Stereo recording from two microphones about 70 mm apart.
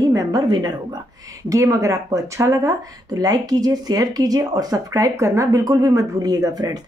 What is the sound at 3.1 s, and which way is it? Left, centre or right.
Speech, right.